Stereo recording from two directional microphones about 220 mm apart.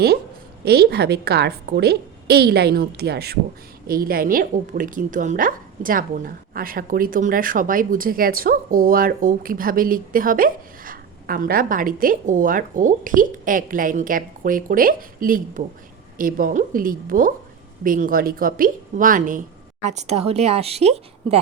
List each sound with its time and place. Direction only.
0.6 s a woman's voice: 45° right (ahead or behind); by 21.4 s 30° right (ahead or behind)